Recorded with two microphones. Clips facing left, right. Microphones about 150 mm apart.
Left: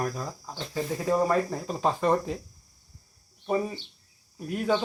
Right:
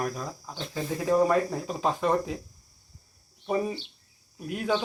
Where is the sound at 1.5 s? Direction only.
5° right (ahead or behind).